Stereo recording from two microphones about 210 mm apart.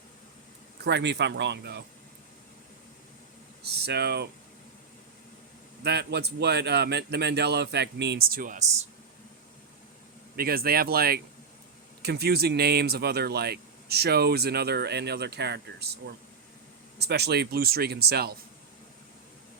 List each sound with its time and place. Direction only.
0.9 s speech: 55° right (ahead or behind)
3.6 s speech: 50° right (ahead or behind)
5.8 s speech: 55° right (ahead or behind)
10.3 s speech: 45° right (ahead or behind)